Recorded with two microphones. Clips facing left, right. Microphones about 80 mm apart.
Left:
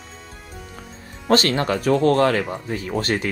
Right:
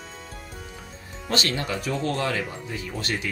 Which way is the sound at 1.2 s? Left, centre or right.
Left.